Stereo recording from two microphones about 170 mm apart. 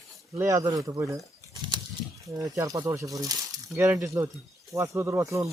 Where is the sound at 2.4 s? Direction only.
20° right (ahead or behind).